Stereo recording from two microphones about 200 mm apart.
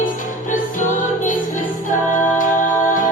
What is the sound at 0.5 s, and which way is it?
Music, 40° left (ahead or behind).